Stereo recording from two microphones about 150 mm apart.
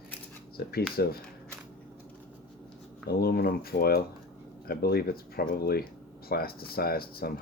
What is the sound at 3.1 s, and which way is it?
Speech, 90° left.